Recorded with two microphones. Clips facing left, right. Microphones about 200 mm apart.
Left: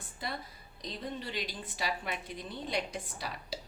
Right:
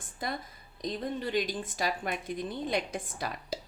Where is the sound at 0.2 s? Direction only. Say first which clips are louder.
Right 4 dB; 50° right (ahead or behind).